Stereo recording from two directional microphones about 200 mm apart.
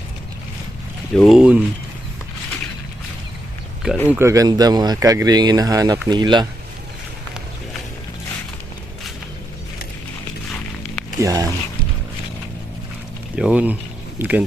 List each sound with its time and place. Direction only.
1.1 s speech: centre (ahead or behind)
3.8 s speech: centre (ahead or behind)
4.2 s speech: 15° right (ahead or behind)
11.2 s speech: 15° right (ahead or behind)
13.3 s speech: 5° right (ahead or behind)